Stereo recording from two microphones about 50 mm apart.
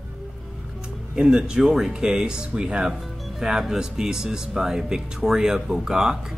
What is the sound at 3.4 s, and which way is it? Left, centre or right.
Speech, centre.